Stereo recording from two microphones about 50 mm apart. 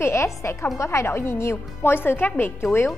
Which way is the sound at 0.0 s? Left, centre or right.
Left.